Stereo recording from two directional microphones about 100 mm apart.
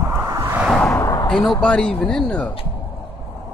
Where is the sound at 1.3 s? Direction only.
5° left (ahead or behind).